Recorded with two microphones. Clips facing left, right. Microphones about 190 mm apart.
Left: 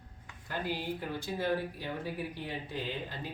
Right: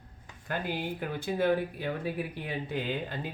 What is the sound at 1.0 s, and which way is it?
Speech, 60° right (ahead or behind).